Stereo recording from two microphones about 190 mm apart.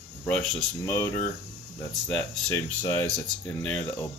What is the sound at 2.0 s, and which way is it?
Speech, 5° left (ahead or behind).